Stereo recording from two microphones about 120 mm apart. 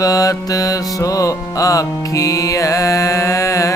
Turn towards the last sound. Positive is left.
turn(degrees=25)  # may be behind; listen again after turning